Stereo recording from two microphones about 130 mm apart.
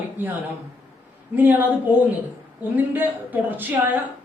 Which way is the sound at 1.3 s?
15° right (ahead or behind).